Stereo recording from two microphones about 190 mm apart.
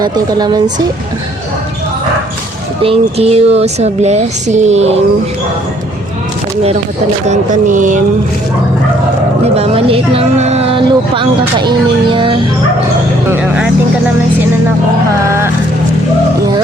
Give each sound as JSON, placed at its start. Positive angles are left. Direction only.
{"t": 0.0, "sound": "speech", "side_deg": -20}
{"t": 2.8, "sound": "speech", "side_deg": -30}
{"t": 7.3, "sound": "speech", "side_deg": -40}
{"t": 9.6, "sound": "speech", "side_deg": -30}
{"t": 13.3, "sound": "speech", "side_deg": -5}